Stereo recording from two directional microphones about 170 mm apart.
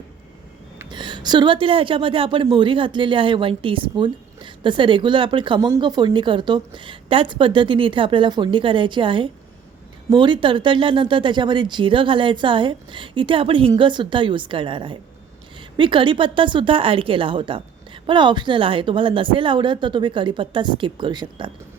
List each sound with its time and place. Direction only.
0.9 s a woman's voice: 25° right (ahead or behind)